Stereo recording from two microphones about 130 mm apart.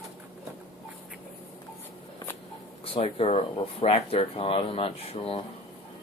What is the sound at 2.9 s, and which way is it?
Speech, 50° left (ahead or behind).